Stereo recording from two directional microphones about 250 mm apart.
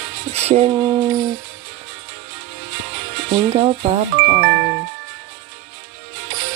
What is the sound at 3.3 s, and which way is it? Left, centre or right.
Speech, right.